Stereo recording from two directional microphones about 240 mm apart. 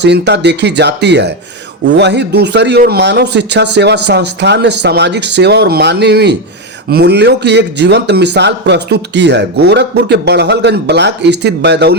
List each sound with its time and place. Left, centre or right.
0.0 s a man's voice: right